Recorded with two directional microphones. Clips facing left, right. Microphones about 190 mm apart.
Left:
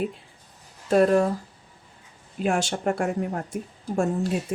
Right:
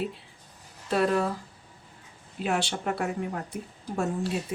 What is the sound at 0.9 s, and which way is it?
Speech, 45° left (ahead or behind).